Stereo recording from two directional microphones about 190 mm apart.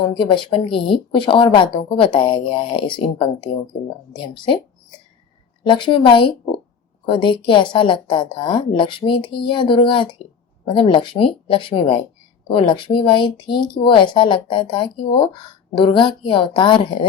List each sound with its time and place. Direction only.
0.0 s speech: 25° left (ahead or behind)
5.6 s speech: 25° left (ahead or behind)